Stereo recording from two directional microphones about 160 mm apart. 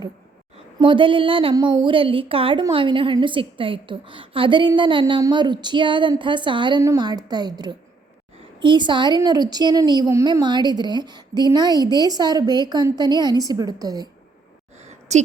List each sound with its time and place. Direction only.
0.8 s a woman's voice: 30° right (ahead or behind)
15.1 s a woman's voice: 45° right (ahead or behind)